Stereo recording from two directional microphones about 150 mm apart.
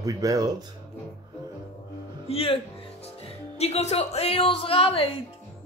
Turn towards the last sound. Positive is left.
turn(degrees=35)  # may be behind; listen again after turning